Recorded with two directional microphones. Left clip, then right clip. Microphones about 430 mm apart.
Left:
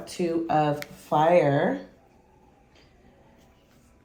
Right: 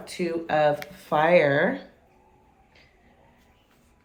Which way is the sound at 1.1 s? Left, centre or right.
Right.